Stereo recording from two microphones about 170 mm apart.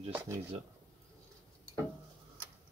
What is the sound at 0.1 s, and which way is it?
Speech, 15° right (ahead or behind).